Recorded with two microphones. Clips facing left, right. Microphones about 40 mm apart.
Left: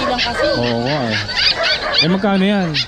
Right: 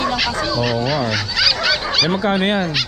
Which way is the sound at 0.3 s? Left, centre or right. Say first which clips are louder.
Left 3 dB; centre.